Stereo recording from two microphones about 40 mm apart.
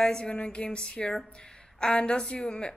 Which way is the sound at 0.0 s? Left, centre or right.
Left.